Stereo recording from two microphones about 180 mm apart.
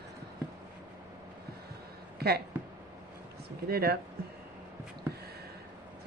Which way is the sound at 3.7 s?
60° right (ahead or behind).